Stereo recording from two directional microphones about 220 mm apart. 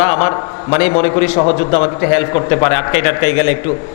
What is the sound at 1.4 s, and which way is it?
A man's voice, 25° left (ahead or behind).